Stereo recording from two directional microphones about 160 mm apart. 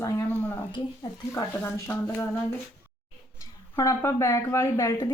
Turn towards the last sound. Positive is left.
turn(degrees=20)  # may be behind; listen again after turning